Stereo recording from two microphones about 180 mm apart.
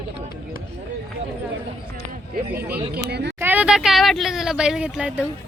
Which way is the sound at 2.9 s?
65° right (ahead or behind).